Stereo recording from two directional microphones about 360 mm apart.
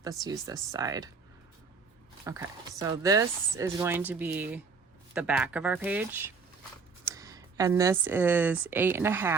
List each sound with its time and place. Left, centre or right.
0.0 s speech: centre
2.2 s speech: centre